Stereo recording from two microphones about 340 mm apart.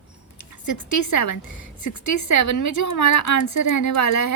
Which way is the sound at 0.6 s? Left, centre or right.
Left.